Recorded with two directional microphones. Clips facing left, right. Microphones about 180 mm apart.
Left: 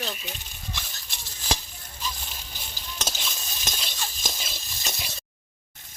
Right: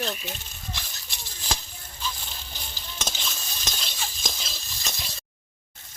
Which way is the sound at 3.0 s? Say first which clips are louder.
Even; 5° left (ahead or behind).